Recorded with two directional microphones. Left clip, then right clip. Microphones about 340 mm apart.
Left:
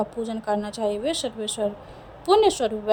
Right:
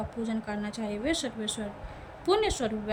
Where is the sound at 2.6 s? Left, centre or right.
Left.